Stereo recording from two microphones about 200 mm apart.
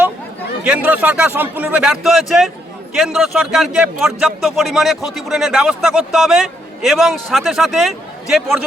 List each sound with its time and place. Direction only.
0.6 s a man's voice: 5° right (ahead or behind)